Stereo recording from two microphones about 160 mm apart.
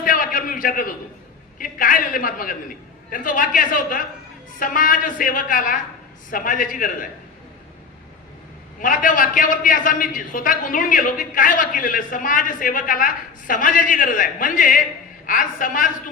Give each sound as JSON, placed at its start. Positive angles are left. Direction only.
{"t": 0.0, "sound": "a sound", "side_deg": 60}
{"t": 1.5, "sound": "a man's voice", "side_deg": 60}
{"t": 8.8, "sound": "a man's voice", "side_deg": 55}